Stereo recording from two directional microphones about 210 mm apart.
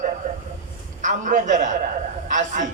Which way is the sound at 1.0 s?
35° right (ahead or behind).